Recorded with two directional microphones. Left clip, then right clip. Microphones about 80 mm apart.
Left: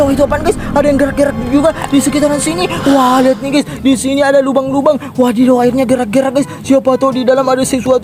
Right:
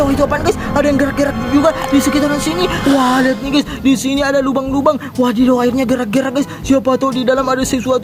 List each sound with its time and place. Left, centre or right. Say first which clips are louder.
0.0 s speech: left 3 dB; left
2.8 s speech: left 5 dB; centre
3.5 s speech: left 2 dB; left